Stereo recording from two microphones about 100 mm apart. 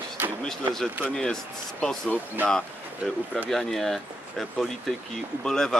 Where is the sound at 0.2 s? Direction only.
20° right (ahead or behind).